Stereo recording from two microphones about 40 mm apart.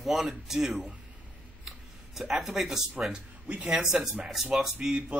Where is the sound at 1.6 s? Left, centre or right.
Centre.